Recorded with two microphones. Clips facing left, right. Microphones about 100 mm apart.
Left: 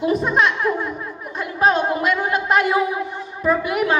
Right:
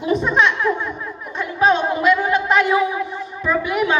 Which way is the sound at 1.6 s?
45° left (ahead or behind).